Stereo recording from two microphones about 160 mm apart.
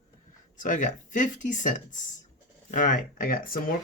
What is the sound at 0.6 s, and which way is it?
Speech, 50° left (ahead or behind).